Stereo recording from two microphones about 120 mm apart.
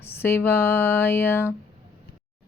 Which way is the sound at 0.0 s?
20° left (ahead or behind).